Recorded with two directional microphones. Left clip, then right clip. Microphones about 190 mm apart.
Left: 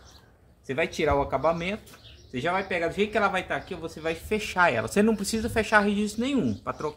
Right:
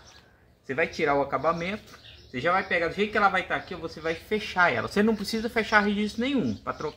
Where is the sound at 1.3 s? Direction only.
50° left (ahead or behind).